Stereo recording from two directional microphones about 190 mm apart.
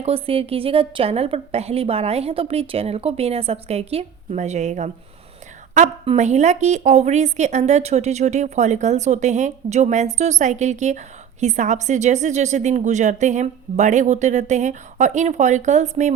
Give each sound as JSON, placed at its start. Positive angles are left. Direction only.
{"t": 0.0, "sound": "a woman's voice", "side_deg": -30}